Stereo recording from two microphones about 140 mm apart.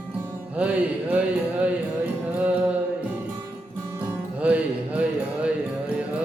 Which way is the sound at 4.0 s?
10° right (ahead or behind).